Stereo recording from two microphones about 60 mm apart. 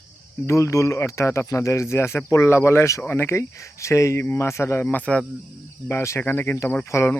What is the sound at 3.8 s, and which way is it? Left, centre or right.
Speech, left.